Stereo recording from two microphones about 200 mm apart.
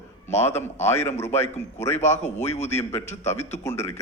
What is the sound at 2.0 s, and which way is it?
Speech, 35° left (ahead or behind).